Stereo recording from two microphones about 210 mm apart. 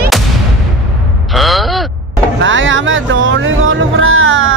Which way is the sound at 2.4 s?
65° right (ahead or behind).